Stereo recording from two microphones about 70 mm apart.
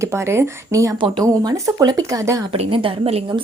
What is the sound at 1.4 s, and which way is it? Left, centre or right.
Speech, right.